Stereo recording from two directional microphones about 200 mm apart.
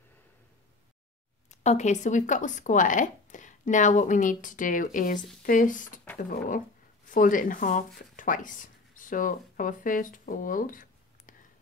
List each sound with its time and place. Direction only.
1.5 s speech: 35° left (ahead or behind)
7.1 s speech: 40° left (ahead or behind)